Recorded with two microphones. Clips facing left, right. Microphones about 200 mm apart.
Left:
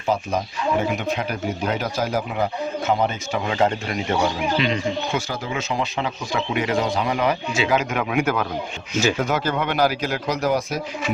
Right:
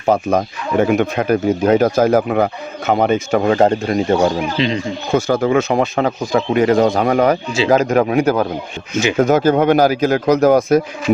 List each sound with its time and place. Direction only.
0.1 s speech: 55° right (ahead or behind)
4.5 s speech: 30° right (ahead or behind)
5.1 s speech: 55° right (ahead or behind); by 8.4 s 35° right (ahead or behind)
9.1 s speech: 45° right (ahead or behind)